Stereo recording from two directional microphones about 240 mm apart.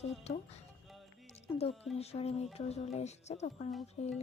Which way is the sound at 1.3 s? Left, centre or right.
Left.